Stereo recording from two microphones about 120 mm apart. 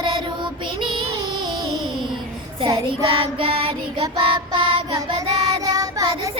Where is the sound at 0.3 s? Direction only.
40° right (ahead or behind).